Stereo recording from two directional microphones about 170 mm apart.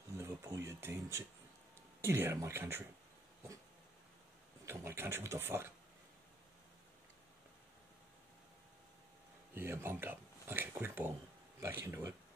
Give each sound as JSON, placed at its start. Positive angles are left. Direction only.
{"t": 0.2, "sound": "a sound", "side_deg": -15}
{"t": 0.7, "sound": "speech", "side_deg": -15}
{"t": 4.6, "sound": "speech", "side_deg": -15}
{"t": 9.5, "sound": "speech", "side_deg": -15}